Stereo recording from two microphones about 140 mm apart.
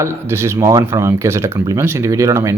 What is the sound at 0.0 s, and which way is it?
Speech, 20° right (ahead or behind).